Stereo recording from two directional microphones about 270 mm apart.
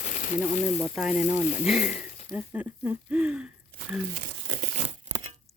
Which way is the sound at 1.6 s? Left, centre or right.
Centre.